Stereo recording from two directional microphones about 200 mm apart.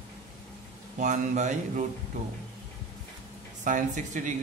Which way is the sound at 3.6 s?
40° right (ahead or behind).